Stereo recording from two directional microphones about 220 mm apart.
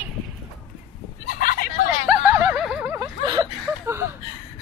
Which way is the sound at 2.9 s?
20° right (ahead or behind).